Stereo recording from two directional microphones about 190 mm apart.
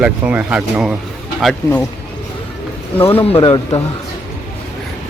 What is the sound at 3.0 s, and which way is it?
Speech, 10° left (ahead or behind).